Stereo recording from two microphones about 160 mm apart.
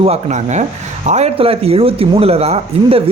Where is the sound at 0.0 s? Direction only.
45° right (ahead or behind).